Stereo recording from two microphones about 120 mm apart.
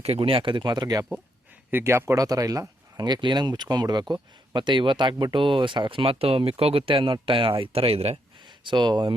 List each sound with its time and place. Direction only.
0.0 s speech: 55° right (ahead or behind); by 1.0 s 35° right (ahead or behind)
1.7 s speech: 20° right (ahead or behind); by 8.2 s 55° right (ahead or behind)
8.4 s speech: 40° right (ahead or behind)